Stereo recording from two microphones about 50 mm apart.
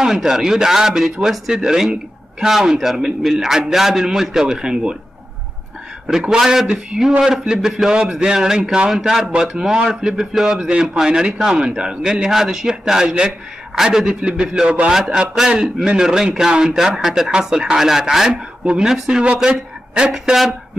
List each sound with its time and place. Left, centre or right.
0.0 s a man's voice: centre
6.0 s a man's voice: centre
20.1 s speech: centre